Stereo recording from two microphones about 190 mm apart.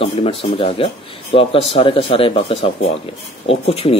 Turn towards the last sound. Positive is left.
turn(degrees=30)  # may be behind; listen again after turning